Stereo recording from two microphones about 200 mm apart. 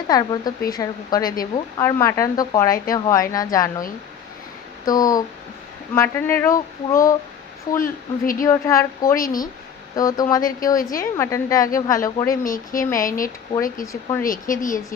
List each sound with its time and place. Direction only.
0.1 s a woman's voice: 20° left (ahead or behind)
4.9 s a woman's voice: 20° left (ahead or behind)
7.8 s speech: 45° left (ahead or behind)
8.4 s a woman's voice: 15° left (ahead or behind)
9.1 s speech: 45° left (ahead or behind)
9.9 s a woman's voice: 20° left (ahead or behind)
12.4 s speech: 45° left (ahead or behind)
13.8 s a woman's voice: 15° left (ahead or behind)
14.3 s speech: 40° left (ahead or behind)